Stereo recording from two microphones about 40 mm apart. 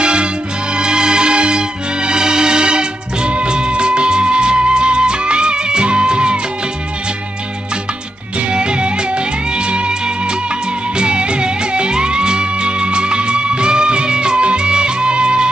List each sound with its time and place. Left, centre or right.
0.0 s music: right
8.4 s music: right
10.9 s music: right